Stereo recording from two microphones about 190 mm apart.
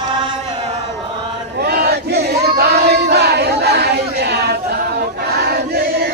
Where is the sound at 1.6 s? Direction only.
55° right (ahead or behind).